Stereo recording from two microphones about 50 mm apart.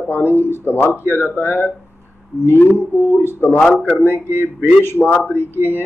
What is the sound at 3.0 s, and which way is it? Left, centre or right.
Speech, left.